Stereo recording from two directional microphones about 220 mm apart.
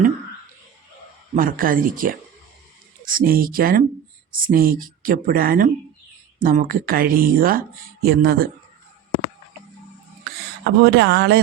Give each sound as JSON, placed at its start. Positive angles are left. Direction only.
{"t": 1.4, "sound": "speech", "side_deg": -40}
{"t": 10.6, "sound": "speech", "side_deg": -50}